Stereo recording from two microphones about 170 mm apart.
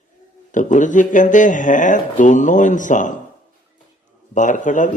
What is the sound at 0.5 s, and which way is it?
Speech, 45° left (ahead or behind).